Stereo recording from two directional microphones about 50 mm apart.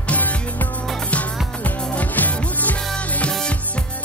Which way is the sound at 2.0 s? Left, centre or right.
Left.